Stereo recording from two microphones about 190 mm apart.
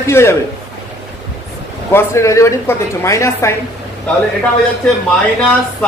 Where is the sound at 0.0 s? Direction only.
15° left (ahead or behind).